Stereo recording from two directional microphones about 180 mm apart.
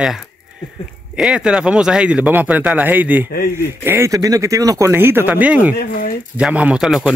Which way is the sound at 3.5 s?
15° right (ahead or behind).